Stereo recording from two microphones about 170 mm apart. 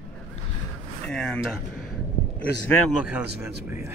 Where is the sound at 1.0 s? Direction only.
5° left (ahead or behind).